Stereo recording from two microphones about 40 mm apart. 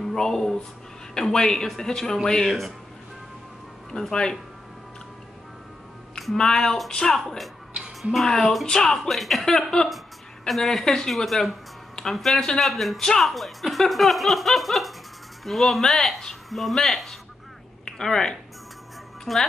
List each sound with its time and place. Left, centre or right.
0.0 s a woman's voice: centre
4.1 s speech: centre
6.3 s a woman's voice: centre
7.2 s a woman's voice: centre
9.1 s speech: centre
9.5 s a woman's voice: centre
11.2 s speech: centre
19.3 s speech: centre